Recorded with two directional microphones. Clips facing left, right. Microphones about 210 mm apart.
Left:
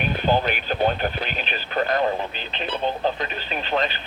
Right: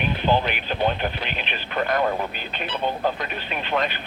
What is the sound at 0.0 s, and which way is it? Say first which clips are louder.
Speech: even; 45° left (ahead or behind).